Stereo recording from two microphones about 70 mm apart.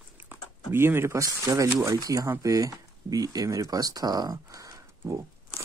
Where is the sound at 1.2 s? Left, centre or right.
Right.